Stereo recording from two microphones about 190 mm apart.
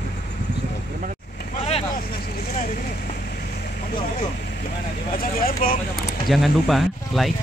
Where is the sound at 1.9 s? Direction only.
45° left (ahead or behind).